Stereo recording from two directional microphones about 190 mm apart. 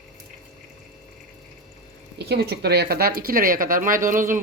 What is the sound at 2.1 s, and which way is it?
Speech, 60° right (ahead or behind).